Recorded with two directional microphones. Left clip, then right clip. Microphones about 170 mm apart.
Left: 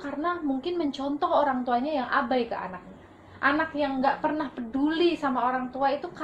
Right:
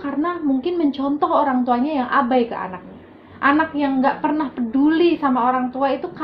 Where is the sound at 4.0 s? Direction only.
25° right (ahead or behind).